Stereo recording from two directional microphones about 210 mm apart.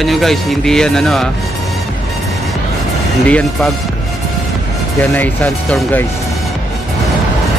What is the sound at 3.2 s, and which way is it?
Speech, 5° left (ahead or behind).